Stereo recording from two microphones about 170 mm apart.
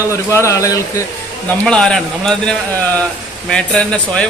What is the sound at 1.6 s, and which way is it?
A man's voice, 5° left (ahead or behind).